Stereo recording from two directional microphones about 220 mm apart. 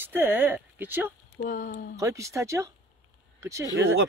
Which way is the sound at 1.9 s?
15° right (ahead or behind).